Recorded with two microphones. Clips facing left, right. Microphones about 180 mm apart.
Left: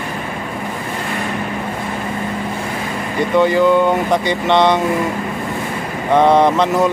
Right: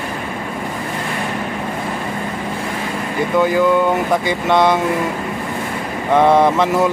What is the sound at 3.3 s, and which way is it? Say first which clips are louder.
Speech: left 2 dB; 5° right (ahead or behind).